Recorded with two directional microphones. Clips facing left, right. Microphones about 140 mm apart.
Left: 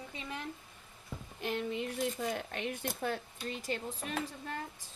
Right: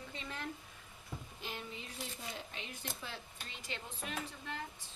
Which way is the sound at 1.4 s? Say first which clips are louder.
Left 13 dB; 65° left (ahead or behind).